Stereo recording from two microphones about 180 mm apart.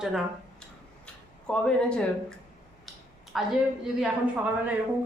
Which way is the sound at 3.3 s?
Centre (ahead or behind).